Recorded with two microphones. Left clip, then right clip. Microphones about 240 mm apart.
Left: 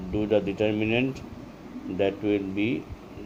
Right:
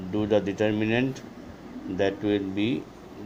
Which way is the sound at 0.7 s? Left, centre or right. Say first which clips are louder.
Even; right.